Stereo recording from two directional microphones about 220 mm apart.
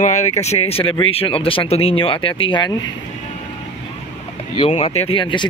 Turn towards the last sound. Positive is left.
turn(degrees=25)  # may be behind; listen again after turning